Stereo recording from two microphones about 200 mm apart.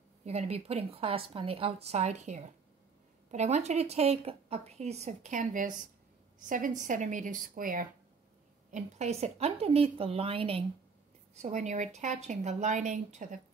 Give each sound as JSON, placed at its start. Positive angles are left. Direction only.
{"t": 0.2, "sound": "a woman's voice", "side_deg": -30}